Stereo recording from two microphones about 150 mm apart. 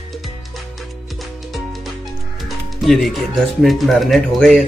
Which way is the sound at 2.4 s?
Centre (ahead or behind).